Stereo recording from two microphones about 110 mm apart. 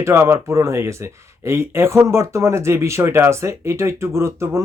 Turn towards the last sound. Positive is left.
turn(degrees=-25)  # may be behind; listen again after turning